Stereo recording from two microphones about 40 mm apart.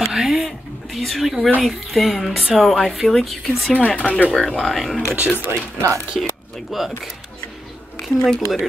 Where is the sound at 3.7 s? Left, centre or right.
Left.